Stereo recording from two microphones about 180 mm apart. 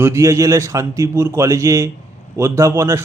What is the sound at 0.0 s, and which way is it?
Speech, 15° right (ahead or behind).